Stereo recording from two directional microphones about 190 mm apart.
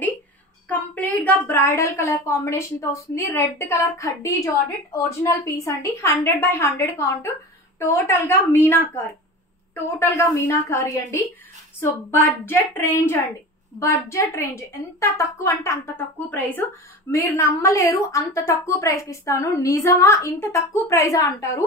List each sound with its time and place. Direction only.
1.2 s a woman's voice: 10° left (ahead or behind)